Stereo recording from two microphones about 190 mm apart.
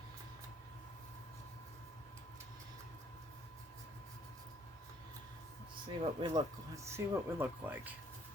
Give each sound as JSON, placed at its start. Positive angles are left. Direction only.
{"t": 6.0, "sound": "speech", "side_deg": -25}
{"t": 6.7, "sound": "speech", "side_deg": -15}